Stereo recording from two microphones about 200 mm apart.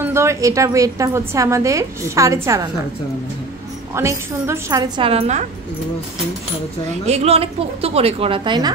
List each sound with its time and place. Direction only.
0.0 s a woman's voice: 15° right (ahead or behind)
3.9 s a woman's voice: 15° right (ahead or behind); by 5.4 s 30° right (ahead or behind)
7.1 s a woman's voice: 30° right (ahead or behind)